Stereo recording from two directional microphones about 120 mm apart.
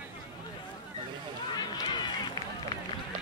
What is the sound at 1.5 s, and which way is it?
Speech, 35° left (ahead or behind).